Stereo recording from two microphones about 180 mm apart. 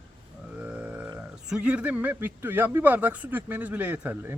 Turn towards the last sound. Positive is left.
turn(degrees=-10)  # may be behind; listen again after turning